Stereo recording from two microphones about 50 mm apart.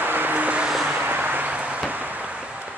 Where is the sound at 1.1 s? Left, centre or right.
Right.